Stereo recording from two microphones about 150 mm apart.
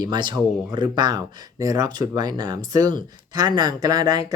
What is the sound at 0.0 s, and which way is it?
Speech, 30° right (ahead or behind).